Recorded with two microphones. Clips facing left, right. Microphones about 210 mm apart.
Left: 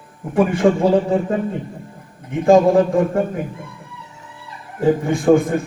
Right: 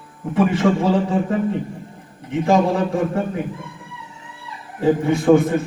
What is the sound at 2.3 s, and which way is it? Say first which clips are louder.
Speech: left 5 dB; 50° left (ahead or behind).